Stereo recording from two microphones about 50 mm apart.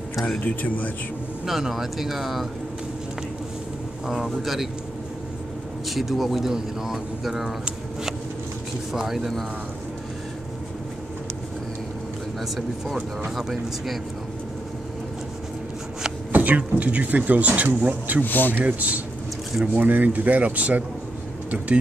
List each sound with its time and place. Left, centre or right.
0.4 s speech: left
1.4 s speech: centre
4.1 s speech: centre
5.9 s speech: centre
8.9 s speech: centre
12.4 s speech: centre
16.3 s speech: right
18.2 s speech: left
18.6 s speech: right